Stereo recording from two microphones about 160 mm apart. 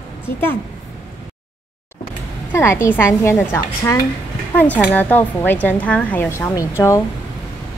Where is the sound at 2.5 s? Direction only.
15° left (ahead or behind).